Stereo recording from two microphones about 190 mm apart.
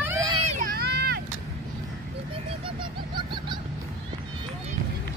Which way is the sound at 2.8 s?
25° right (ahead or behind).